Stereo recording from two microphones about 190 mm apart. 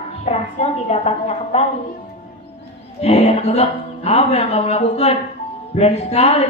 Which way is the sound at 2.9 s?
35° left (ahead or behind).